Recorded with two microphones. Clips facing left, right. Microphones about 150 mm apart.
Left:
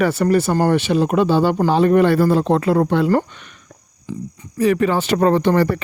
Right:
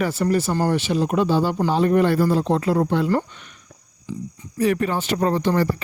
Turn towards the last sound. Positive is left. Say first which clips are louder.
# left 5 dB
turn(degrees=70)  # may be behind; listen again after turning